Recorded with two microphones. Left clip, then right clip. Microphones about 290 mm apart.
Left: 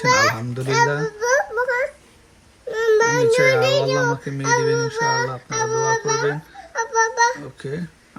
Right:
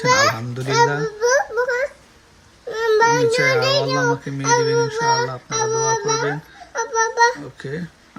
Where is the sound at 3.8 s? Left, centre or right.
Centre.